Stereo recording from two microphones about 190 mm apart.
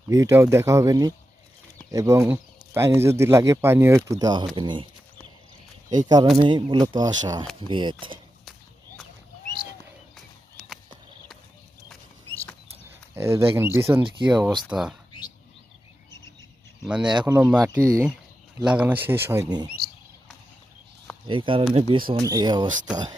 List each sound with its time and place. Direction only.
0.1 s speech: 15° right (ahead or behind)
5.9 s speech: 20° right (ahead or behind)
13.1 s speech: 15° right (ahead or behind)
16.8 s speech: 5° right (ahead or behind); by 19.7 s 20° right (ahead or behind)
21.2 s speech: 25° right (ahead or behind)